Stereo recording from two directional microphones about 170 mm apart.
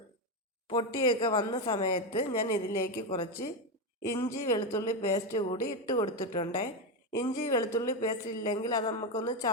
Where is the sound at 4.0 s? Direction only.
20° left (ahead or behind).